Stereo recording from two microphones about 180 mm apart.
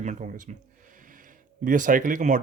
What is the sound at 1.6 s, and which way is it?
Speech, 45° right (ahead or behind).